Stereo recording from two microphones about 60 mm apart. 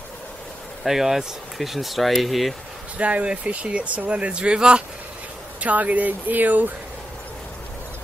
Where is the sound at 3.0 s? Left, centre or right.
Right.